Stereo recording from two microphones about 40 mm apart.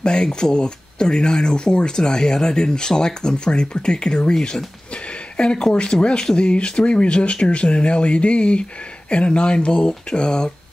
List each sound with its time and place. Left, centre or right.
0.0 s speech: left